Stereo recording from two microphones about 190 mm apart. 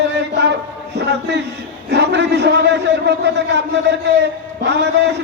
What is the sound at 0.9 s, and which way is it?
A man's voice, 65° right (ahead or behind).